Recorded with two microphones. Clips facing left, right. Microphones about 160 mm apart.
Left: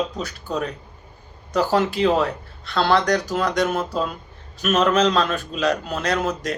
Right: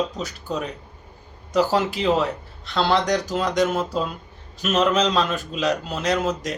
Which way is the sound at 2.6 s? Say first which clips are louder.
Left 2 dB; 20° right (ahead or behind).